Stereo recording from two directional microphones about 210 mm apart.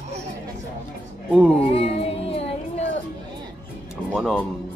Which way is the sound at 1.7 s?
30° left (ahead or behind).